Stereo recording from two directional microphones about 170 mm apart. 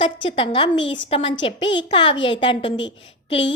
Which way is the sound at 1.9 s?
30° left (ahead or behind).